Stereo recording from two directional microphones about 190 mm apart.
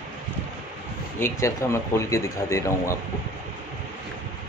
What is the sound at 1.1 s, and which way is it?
Speech, 15° left (ahead or behind).